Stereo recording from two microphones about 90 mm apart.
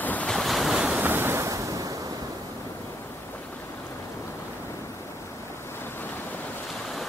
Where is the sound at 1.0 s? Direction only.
25° right (ahead or behind).